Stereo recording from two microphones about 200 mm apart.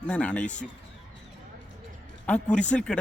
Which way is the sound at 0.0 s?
5° left (ahead or behind).